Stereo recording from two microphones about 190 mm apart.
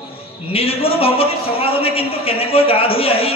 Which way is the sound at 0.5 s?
30° left (ahead or behind).